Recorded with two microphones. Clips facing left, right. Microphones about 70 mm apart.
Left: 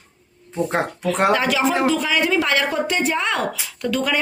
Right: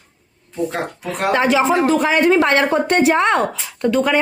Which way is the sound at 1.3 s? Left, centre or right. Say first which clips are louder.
Right 3 dB; right.